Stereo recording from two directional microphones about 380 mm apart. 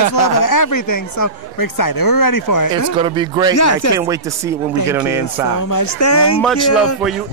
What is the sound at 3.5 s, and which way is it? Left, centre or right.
Speech, left.